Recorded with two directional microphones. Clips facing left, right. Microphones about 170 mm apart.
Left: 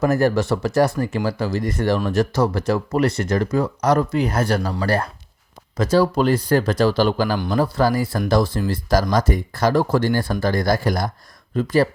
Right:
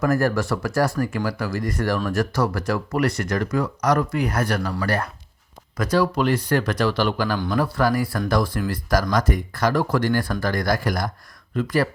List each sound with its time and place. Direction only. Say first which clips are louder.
0.0 s speech: left 3 dB; 20° left (ahead or behind)